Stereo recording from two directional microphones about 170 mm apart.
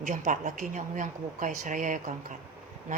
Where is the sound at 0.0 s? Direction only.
50° right (ahead or behind).